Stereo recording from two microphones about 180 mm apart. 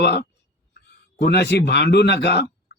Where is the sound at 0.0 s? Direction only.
65° left (ahead or behind).